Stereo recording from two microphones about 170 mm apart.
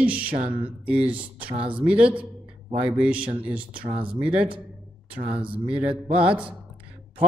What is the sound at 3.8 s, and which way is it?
Speech, 30° right (ahead or behind).